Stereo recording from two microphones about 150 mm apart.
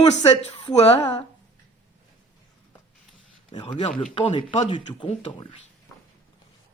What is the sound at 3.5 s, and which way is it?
Speech, 35° left (ahead or behind).